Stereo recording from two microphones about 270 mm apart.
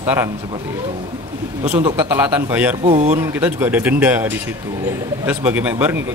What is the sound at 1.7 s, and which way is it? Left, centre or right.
Speech, centre.